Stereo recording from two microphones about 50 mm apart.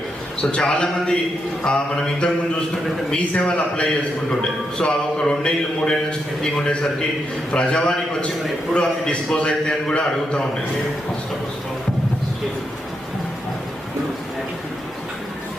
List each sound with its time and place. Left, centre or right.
0.5 s a man's voice: left
1.6 s music: centre
3.1 s a man's voice: centre
4.3 s music: centre